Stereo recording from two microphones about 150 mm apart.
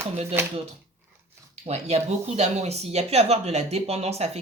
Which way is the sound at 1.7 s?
45° right (ahead or behind).